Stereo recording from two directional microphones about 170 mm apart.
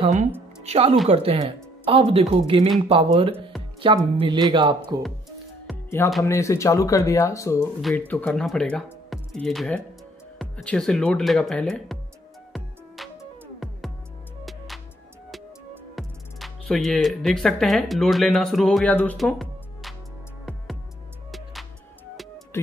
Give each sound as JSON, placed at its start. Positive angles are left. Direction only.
{"t": 0.0, "sound": "speech", "side_deg": -45}
{"t": 6.2, "sound": "speech", "side_deg": 15}
{"t": 12.5, "sound": "music", "side_deg": 0}
{"t": 16.0, "sound": "speech", "side_deg": 0}
{"t": 19.1, "sound": "music", "side_deg": 0}
{"t": 21.3, "sound": "music", "side_deg": 0}